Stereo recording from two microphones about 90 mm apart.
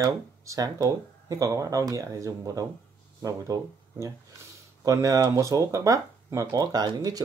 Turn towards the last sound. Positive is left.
turn(degrees=-50)  # may be behind; listen again after turning